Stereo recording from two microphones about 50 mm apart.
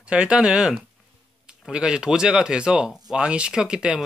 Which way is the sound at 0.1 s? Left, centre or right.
Centre.